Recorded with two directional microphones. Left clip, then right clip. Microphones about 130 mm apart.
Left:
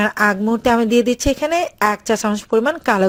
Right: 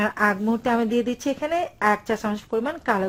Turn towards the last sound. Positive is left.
turn(degrees=45)  # may be behind; listen again after turning